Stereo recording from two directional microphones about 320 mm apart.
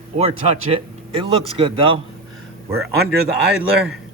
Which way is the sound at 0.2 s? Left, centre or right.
Centre.